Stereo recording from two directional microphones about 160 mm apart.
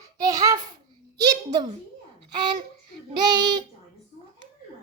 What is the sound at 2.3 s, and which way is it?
Child singing, 25° right (ahead or behind).